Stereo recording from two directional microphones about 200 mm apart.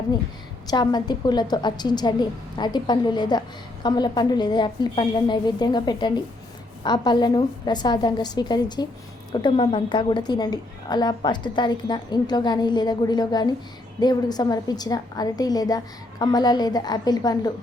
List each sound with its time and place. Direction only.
0.7 s a woman's voice: 20° left (ahead or behind)